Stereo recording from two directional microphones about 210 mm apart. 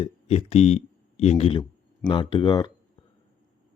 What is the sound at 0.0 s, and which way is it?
Speech, 30° left (ahead or behind).